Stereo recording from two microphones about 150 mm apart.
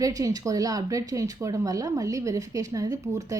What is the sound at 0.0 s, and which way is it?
A woman's voice, 25° right (ahead or behind).